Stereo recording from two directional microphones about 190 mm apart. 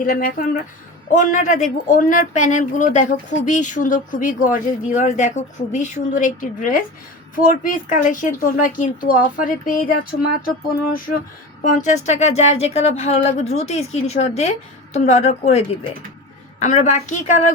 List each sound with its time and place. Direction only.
0.0 s speech: 45° left (ahead or behind)
11.6 s speech: 40° left (ahead or behind)